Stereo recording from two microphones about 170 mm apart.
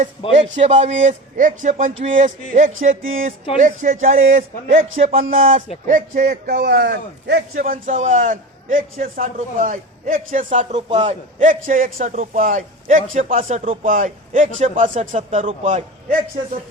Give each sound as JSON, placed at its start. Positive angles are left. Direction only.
{"t": 0.5, "sound": "a man's voice", "side_deg": -40}